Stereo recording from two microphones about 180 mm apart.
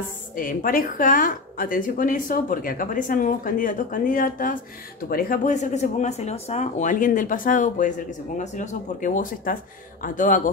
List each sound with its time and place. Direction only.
0.4 s speech: 50° left (ahead or behind)